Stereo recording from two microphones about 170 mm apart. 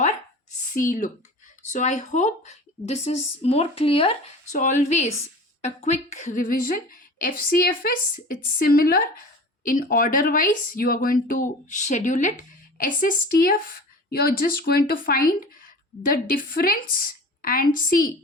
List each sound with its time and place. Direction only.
0.7 s speech: 50° left (ahead or behind); by 4.2 s 35° left (ahead or behind)
4.5 s speech: 45° left (ahead or behind)